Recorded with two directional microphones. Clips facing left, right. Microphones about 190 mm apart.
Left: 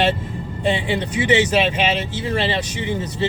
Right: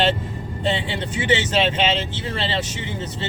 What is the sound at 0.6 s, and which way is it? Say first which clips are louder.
Speech: left 3 dB; 15° left (ahead or behind).